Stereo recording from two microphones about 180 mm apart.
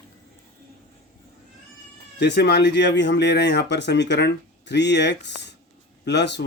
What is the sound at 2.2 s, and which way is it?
Speech, 70° left (ahead or behind).